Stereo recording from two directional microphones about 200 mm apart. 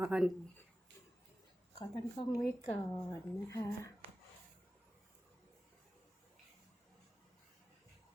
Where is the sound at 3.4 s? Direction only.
15° left (ahead or behind).